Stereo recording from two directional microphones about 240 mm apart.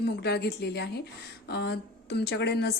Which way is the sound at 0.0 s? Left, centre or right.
Left.